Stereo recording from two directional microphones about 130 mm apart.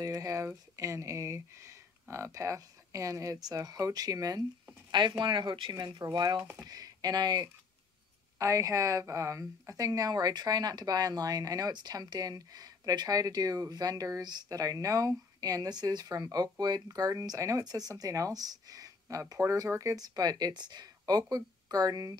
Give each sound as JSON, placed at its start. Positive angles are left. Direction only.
{"t": 0.0, "sound": "a woman's voice", "side_deg": -25}